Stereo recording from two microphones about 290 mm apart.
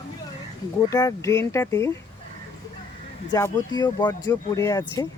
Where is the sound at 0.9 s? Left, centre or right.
Centre.